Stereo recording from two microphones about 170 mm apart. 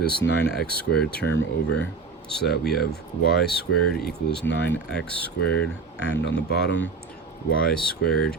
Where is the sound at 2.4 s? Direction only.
70° left (ahead or behind).